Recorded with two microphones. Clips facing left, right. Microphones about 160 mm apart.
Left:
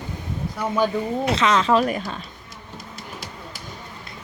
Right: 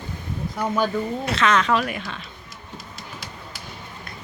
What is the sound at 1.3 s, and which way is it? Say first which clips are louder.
Speech: left 1 dB; 20° left (ahead or behind).